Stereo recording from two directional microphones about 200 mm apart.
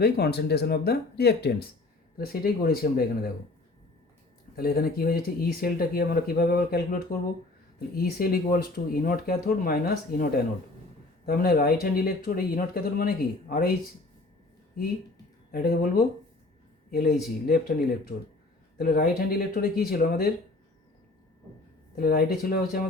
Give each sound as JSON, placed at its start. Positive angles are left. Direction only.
{"t": 0.0, "sound": "speech", "side_deg": 55}
{"t": 4.5, "sound": "speech", "side_deg": 50}
{"t": 15.5, "sound": "speech", "side_deg": 50}
{"t": 21.9, "sound": "speech", "side_deg": 45}